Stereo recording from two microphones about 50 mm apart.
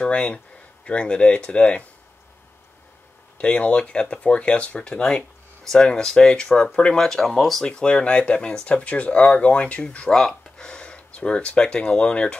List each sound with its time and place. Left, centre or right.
0.0 s speech: centre
3.3 s speech: left
7.2 s speech: centre
7.6 s speech: centre
10.0 s speech: centre